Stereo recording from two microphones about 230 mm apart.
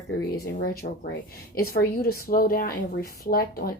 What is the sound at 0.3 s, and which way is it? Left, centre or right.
A woman's voice, left.